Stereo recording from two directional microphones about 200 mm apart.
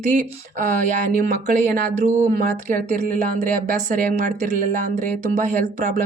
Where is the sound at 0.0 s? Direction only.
35° right (ahead or behind).